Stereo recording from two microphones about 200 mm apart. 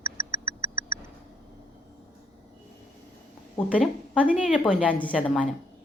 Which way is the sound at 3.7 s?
5° left (ahead or behind).